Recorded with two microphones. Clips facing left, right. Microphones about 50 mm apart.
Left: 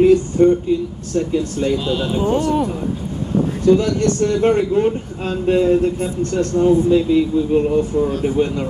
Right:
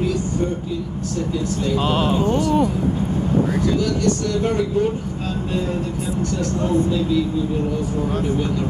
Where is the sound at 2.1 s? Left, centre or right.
Left.